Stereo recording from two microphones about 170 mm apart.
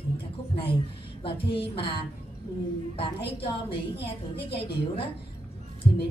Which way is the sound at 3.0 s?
30° left (ahead or behind).